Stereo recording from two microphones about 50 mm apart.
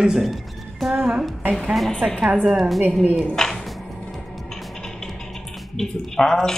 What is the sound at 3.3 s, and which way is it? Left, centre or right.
Speech, centre.